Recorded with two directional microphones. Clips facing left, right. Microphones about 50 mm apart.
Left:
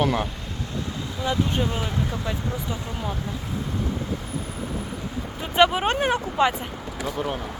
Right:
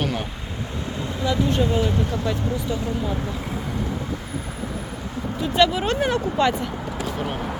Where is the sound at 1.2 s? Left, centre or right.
Left.